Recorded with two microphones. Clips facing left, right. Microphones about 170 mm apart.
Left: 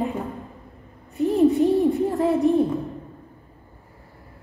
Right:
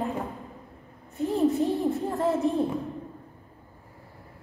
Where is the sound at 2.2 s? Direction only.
15° left (ahead or behind).